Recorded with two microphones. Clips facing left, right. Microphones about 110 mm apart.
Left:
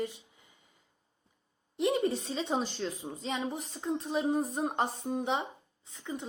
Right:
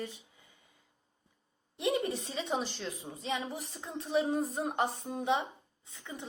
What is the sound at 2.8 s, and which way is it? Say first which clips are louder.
A woman's voice: left 4 dB; 20° left (ahead or behind).